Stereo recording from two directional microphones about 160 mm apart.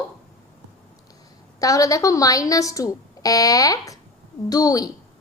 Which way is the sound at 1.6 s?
20° left (ahead or behind).